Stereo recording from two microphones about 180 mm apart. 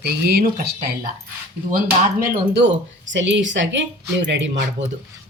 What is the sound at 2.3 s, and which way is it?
Speech, 70° right (ahead or behind).